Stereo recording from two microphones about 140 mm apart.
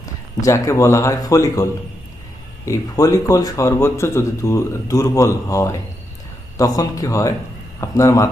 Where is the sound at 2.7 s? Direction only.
25° left (ahead or behind).